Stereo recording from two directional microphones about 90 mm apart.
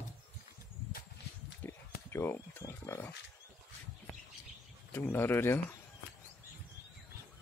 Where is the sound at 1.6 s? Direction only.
30° left (ahead or behind).